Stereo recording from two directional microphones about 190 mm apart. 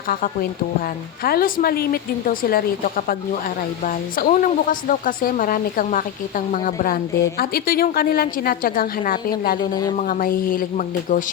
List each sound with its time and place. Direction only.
1.2 s speech: 50° left (ahead or behind)
9.6 s speech: 20° left (ahead or behind)
10.0 s speech: 45° left (ahead or behind)